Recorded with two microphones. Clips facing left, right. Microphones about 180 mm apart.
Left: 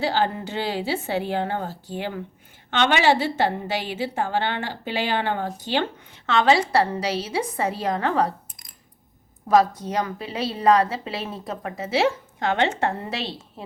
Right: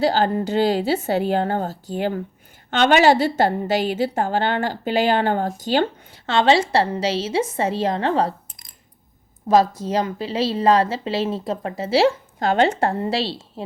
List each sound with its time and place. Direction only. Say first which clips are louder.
0.0 s a woman's voice: right 5 dB; 40° right (ahead or behind)
9.8 s a woman's voice: right 4 dB; 25° right (ahead or behind)